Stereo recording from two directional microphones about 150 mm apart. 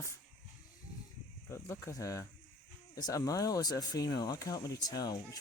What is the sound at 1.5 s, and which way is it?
Speech, 20° left (ahead or behind).